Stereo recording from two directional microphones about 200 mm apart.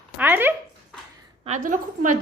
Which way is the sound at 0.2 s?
10° right (ahead or behind).